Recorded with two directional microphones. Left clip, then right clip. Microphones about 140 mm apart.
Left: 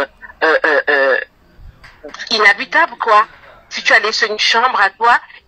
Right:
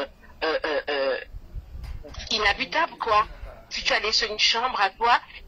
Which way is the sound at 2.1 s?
40° left (ahead or behind).